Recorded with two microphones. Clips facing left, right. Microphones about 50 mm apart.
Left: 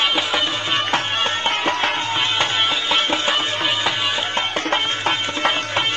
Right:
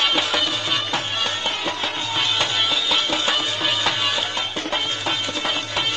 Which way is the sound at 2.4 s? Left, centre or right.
Left.